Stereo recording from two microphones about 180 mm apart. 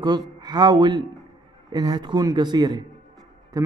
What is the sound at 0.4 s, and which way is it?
Speech, 20° right (ahead or behind).